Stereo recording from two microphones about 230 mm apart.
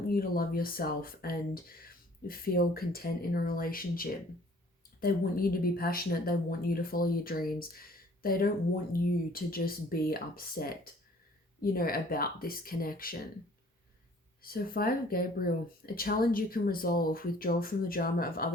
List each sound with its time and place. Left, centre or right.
0.1 s a woman's voice: left
14.4 s a woman's voice: left